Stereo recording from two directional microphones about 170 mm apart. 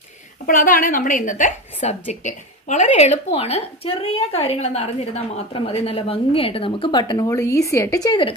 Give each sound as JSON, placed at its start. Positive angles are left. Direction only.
{"t": 0.4, "sound": "a woman's voice", "side_deg": 55}